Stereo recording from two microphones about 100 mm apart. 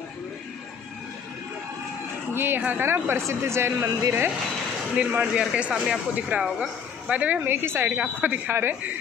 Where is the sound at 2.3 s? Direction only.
20° right (ahead or behind).